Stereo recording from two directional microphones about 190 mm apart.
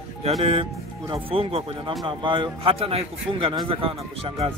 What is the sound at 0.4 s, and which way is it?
Speech, 30° right (ahead or behind).